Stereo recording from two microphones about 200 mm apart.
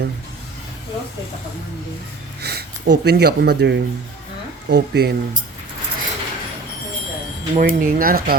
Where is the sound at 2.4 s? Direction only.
55° right (ahead or behind).